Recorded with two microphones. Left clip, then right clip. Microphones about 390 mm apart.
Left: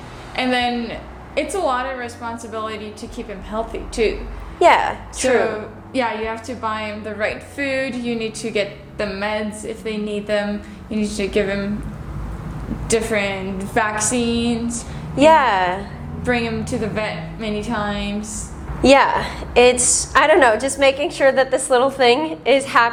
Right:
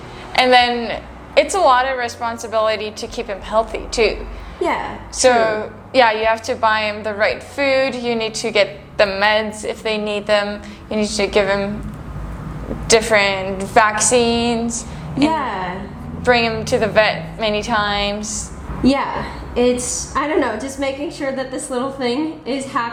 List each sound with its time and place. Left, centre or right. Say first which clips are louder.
0.3 s a woman's voice: right 7 dB; right
5.2 s a woman's voice: right 4 dB; right
12.9 s a woman's voice: right 6 dB; right
15.3 s a woman's voice: left 12 dB; left
16.2 s a woman's voice: right 6 dB; right
18.8 s a woman's voice: left 6 dB; left
19.6 s a woman's voice: left 4 dB; left